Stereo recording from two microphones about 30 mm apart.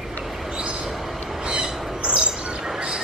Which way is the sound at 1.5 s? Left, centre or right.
Right.